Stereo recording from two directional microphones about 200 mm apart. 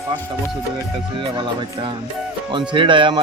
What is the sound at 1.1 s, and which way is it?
Speech, 25° right (ahead or behind).